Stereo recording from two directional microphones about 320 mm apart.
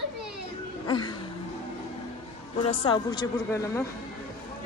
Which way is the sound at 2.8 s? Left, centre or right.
Centre.